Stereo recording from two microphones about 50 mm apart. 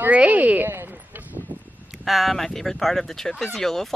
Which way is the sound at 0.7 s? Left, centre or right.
Right.